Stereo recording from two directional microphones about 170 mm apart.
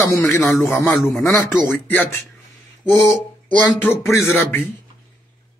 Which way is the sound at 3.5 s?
10° left (ahead or behind).